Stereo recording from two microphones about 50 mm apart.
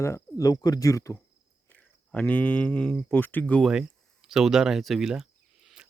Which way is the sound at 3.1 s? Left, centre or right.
Left.